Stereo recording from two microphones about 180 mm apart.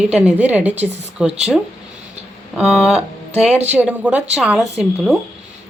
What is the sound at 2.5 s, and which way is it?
A woman's voice, 5° right (ahead or behind).